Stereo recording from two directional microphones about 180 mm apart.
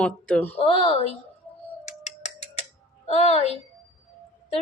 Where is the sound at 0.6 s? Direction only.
30° left (ahead or behind).